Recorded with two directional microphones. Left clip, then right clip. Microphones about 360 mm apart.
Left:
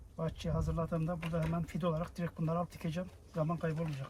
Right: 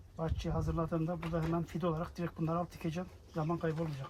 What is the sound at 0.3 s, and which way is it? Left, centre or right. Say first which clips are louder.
Speech: right 1 dB; centre.